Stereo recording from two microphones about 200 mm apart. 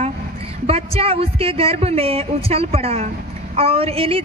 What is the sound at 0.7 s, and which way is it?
Speech, 30° right (ahead or behind).